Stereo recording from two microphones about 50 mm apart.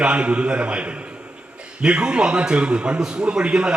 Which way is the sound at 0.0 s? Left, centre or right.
Right.